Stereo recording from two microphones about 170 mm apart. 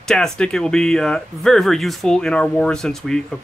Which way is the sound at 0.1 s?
5° left (ahead or behind).